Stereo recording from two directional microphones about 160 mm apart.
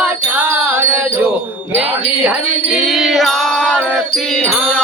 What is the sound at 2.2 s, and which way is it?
Music, centre (ahead or behind).